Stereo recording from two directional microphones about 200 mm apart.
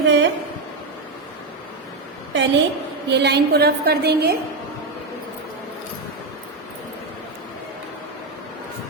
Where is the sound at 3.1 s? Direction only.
55° right (ahead or behind).